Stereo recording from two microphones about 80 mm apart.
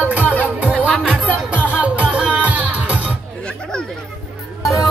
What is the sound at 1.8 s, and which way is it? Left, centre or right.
Music, centre.